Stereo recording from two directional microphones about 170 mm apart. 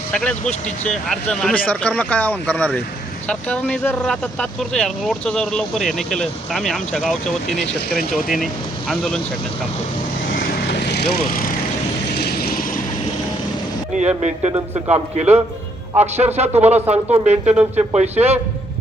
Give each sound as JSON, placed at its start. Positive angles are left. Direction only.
{"t": 0.1, "sound": "speech", "side_deg": 5}
{"t": 10.2, "sound": "vehicle", "side_deg": 60}
{"t": 14.2, "sound": "speech", "side_deg": -40}